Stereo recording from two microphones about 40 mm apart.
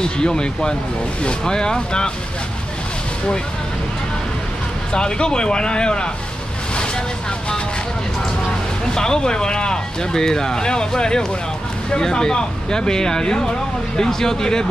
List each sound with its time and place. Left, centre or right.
0.0 s speech: centre
4.9 s speech: left
8.9 s speech: centre